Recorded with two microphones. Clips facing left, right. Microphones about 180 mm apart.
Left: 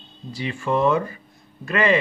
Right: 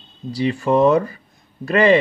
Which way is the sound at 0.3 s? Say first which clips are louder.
Right 6 dB; 35° right (ahead or behind).